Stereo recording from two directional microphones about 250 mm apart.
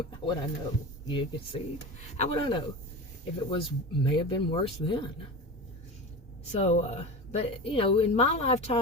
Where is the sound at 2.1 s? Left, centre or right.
Left.